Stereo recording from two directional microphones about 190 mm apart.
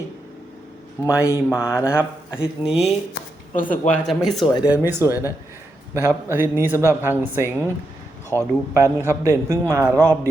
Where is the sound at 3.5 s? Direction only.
45° left (ahead or behind).